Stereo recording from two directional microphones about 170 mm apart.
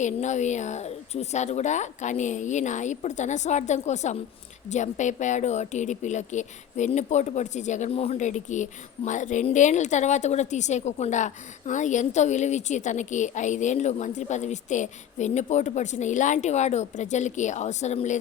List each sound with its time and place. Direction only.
0.0 s a woman's voice: 45° left (ahead or behind)